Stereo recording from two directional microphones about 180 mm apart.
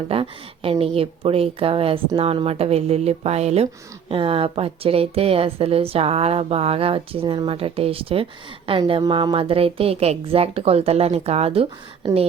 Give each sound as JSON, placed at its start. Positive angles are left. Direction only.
{"t": 0.1, "sound": "a woman's voice", "side_deg": -30}